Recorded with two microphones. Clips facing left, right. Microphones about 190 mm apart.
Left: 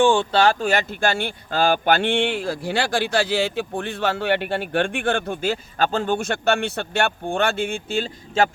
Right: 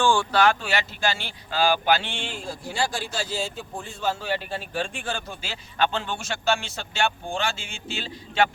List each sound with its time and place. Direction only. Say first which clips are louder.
0.0 s speech: left 4 dB; 20° left (ahead or behind)
0.6 s speech: left 6 dB; 50° left (ahead or behind)